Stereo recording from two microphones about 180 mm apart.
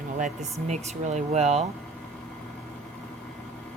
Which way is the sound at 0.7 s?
40° right (ahead or behind).